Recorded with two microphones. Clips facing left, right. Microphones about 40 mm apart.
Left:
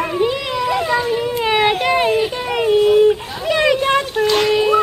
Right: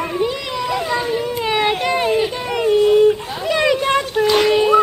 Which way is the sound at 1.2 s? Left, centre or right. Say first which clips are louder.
Left 2 dB; centre.